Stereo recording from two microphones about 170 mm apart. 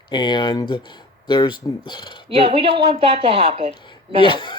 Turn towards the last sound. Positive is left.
turn(degrees=25)  # may be behind; listen again after turning